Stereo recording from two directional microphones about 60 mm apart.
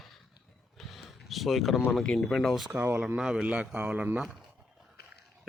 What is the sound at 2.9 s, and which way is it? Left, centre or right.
A man's voice, centre.